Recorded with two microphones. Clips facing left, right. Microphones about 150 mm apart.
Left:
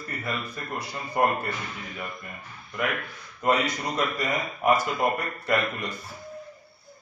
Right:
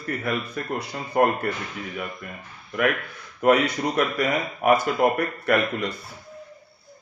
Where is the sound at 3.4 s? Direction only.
65° right (ahead or behind).